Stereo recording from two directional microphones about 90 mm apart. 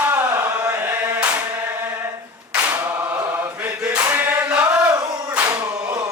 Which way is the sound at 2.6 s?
20° right (ahead or behind).